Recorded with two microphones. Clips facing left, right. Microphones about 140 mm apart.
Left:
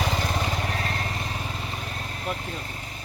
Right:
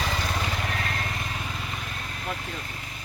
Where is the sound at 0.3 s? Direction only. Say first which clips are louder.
Left 2 dB; 30° left (ahead or behind).